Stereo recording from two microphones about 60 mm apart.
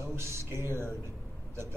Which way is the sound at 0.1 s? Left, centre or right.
Right.